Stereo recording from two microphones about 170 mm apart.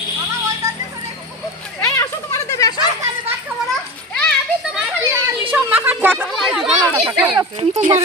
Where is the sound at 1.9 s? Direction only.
20° left (ahead or behind).